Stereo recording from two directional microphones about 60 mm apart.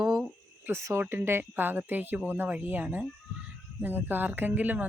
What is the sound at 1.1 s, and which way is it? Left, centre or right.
Speech, right.